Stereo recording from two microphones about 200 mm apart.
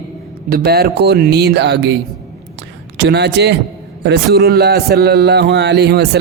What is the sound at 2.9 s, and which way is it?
A man's voice, 60° right (ahead or behind).